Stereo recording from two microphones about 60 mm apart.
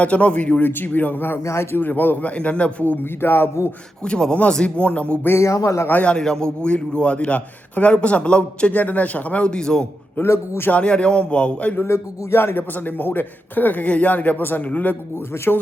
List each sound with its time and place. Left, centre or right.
0.0 s a man's voice: left
0.6 s a man's voice: left
2.3 s a man's voice: left
4.0 s speech: centre
5.4 s speech: left
5.9 s a man's voice: left
6.1 s a man's voice: centre
8.7 s a man's voice: left; by 9.8 s centre
10.2 s a man's voice: left
10.7 s a man's voice: centre
11.7 s a man's voice: left
12.7 s a man's voice: left